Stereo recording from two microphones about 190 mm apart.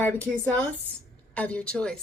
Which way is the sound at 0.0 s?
10° left (ahead or behind).